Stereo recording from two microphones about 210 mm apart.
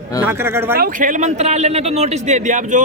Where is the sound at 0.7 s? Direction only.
40° right (ahead or behind).